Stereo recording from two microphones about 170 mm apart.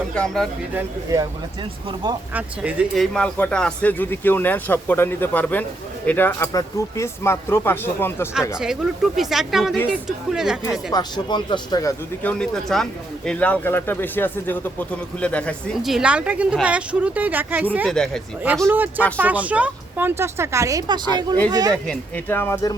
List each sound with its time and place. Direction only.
0.1 s speech: 5° left (ahead or behind)
1.1 s speech: 20° right (ahead or behind)
2.3 s speech: 5° right (ahead or behind); by 8.3 s 15° left (ahead or behind)
8.5 s speech: 5° right (ahead or behind)
10.9 s speech: 25° left (ahead or behind)
12.2 s speech: 5° left (ahead or behind); by 17.8 s 10° right (ahead or behind)
17.8 s speech: 5° left (ahead or behind)
18.6 s speech: 10° right (ahead or behind)
21.8 s speech: 10° left (ahead or behind)